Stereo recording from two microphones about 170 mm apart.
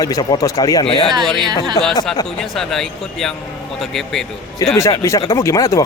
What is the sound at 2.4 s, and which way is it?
Speech, centre (ahead or behind).